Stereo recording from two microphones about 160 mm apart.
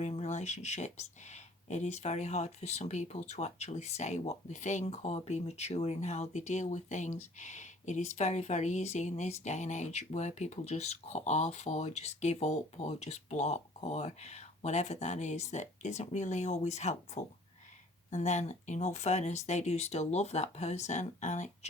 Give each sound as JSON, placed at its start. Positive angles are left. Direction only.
{"t": 0.0, "sound": "speech", "side_deg": 45}